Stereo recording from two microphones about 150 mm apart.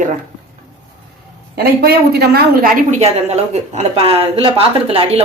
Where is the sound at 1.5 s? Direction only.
90° right.